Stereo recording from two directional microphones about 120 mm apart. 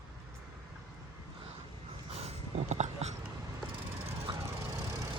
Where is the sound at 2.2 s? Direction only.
75° right (ahead or behind).